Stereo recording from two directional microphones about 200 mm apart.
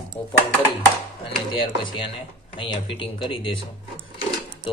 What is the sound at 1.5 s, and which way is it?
Speech, 25° left (ahead or behind).